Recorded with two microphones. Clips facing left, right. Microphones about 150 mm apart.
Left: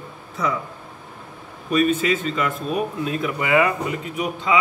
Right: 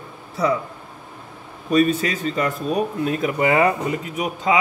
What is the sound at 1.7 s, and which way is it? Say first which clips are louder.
A man's voice: right 1 dB; 40° right (ahead or behind).